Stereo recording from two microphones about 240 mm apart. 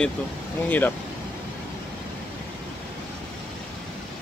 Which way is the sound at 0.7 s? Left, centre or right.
Centre.